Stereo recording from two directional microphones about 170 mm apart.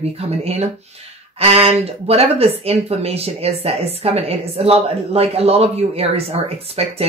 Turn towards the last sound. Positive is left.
turn(degrees=-35)  # may be behind; listen again after turning